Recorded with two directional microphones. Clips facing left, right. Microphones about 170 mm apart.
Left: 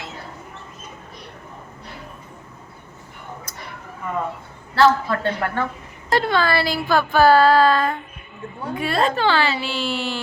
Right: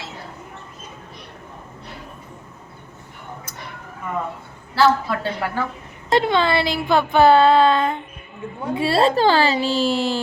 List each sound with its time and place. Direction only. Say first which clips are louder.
4.7 s a woman's voice: left 1 dB; 5° right (ahead or behind)
6.1 s speech: right 2 dB; 20° right (ahead or behind); by 10.2 s 35° right (ahead or behind)